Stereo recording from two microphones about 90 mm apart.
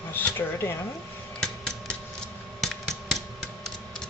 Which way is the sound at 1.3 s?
10° left (ahead or behind).